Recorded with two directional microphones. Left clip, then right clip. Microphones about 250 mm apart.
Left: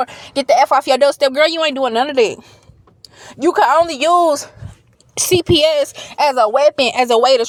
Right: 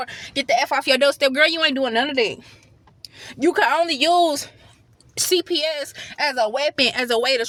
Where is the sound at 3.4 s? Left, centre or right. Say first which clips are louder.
Left 6 dB; centre.